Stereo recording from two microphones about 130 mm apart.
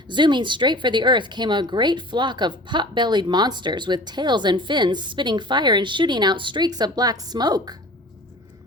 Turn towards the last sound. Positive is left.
turn(degrees=-30)  # may be behind; listen again after turning